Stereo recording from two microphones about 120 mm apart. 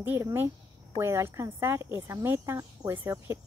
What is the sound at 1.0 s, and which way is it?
Speech, 20° right (ahead or behind).